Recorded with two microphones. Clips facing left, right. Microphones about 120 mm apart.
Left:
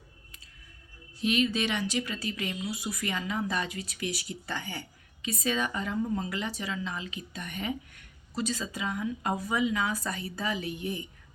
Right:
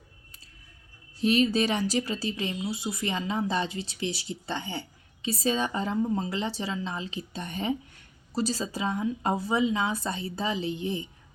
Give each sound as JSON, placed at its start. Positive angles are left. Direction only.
{"t": 1.2, "sound": "speech", "side_deg": -35}